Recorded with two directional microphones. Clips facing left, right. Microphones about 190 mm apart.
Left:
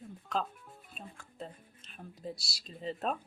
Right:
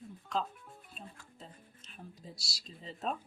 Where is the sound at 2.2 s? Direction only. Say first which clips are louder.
Left 8 dB; 60° left (ahead or behind).